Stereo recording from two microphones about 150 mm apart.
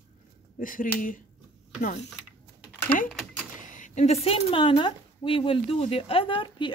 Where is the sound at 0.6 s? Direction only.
65° left (ahead or behind).